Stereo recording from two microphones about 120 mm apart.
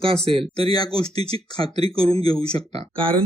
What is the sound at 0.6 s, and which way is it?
Speech, 35° left (ahead or behind).